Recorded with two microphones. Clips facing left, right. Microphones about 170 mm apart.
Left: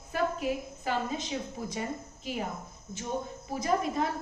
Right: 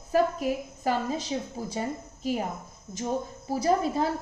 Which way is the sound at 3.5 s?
35° right (ahead or behind).